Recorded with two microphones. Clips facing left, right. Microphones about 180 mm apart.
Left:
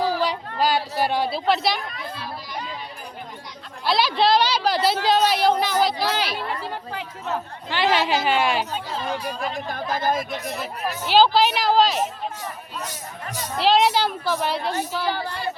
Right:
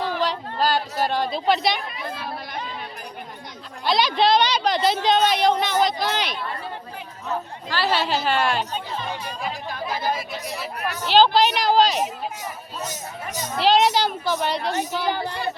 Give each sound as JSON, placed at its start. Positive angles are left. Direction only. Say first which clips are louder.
{"t": 0.2, "sound": "a sound", "louder": "even", "side_deg": 10}
{"t": 3.8, "sound": "speech", "louder": "even", "side_deg": 5}
{"t": 6.5, "sound": "speech", "louder": "left 3 dB", "side_deg": 90}
{"t": 7.7, "sound": "a woman's voice", "louder": "left 2 dB", "side_deg": 15}
{"t": 9.2, "sound": "speech", "louder": "left 2 dB", "side_deg": 0}
{"t": 9.9, "sound": "speech", "louder": "left 3 dB", "side_deg": 50}
{"t": 10.5, "sound": "speech", "louder": "left 1 dB", "side_deg": 0}
{"t": 13.6, "sound": "speech", "louder": "even", "side_deg": 0}
{"t": 15.0, "sound": "a woman's voice", "louder": "right 1 dB", "side_deg": -20}